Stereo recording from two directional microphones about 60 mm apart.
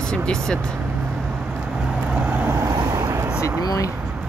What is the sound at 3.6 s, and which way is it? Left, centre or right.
Speech, left.